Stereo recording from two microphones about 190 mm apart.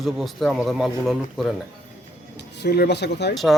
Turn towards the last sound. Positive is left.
turn(degrees=60)  # may be behind; listen again after turning